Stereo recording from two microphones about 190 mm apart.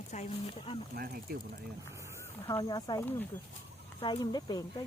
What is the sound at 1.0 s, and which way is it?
Speech, 55° right (ahead or behind).